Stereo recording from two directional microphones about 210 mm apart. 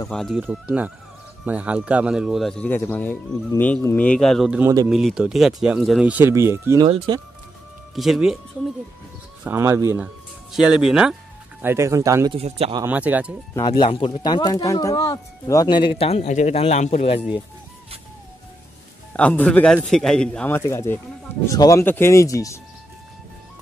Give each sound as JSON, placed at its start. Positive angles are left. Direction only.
{"t": 0.1, "sound": "speech", "side_deg": 0}
{"t": 7.9, "sound": "speech", "side_deg": 0}
{"t": 9.4, "sound": "speech", "side_deg": -10}
{"t": 11.6, "sound": "speech", "side_deg": -10}
{"t": 12.4, "sound": "speech", "side_deg": -30}
{"t": 12.8, "sound": "speech", "side_deg": -5}
{"t": 13.6, "sound": "speech", "side_deg": 25}
{"t": 19.1, "sound": "a man's voice", "side_deg": 5}